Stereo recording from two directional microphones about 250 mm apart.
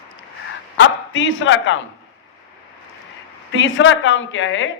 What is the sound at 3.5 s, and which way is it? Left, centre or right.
Speech, left.